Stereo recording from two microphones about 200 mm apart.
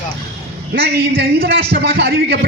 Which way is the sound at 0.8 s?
50° right (ahead or behind).